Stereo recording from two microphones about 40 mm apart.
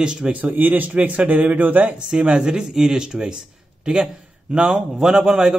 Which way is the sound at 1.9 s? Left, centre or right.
Right.